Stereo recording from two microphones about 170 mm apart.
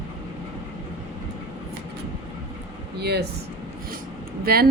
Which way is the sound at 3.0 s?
75° right (ahead or behind).